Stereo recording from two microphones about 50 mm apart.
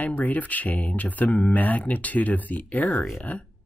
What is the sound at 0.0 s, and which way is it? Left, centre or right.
Speech, left.